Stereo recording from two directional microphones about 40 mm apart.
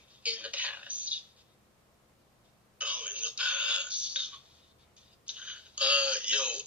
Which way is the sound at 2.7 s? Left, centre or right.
Right.